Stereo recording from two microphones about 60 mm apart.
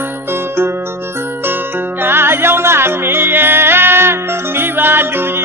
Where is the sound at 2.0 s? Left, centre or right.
Right.